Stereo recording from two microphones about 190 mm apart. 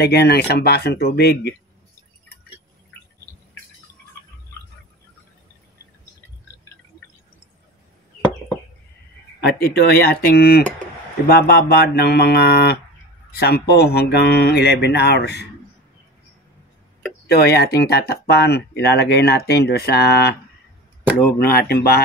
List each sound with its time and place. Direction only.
0.0 s speech: 60° left (ahead or behind)
9.6 s speech: 60° left (ahead or behind)
17.3 s speech: 60° left (ahead or behind)
21.4 s speech: 50° left (ahead or behind)